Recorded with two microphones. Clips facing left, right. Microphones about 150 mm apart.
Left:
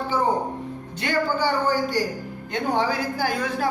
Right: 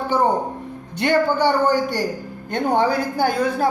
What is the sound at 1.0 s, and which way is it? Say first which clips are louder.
A woman's voice: right 6 dB; 65° right (ahead or behind).